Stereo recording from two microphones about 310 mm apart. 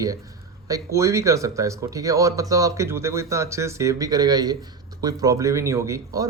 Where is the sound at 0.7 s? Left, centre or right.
Centre.